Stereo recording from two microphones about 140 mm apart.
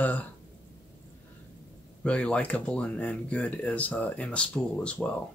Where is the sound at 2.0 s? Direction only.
10° left (ahead or behind).